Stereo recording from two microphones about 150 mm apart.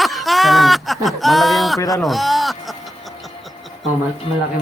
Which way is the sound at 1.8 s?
20° left (ahead or behind).